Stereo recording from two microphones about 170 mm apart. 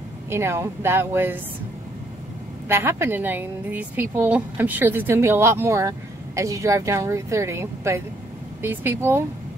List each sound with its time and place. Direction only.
0.3 s speech: 15° right (ahead or behind)
2.7 s speech: 15° right (ahead or behind)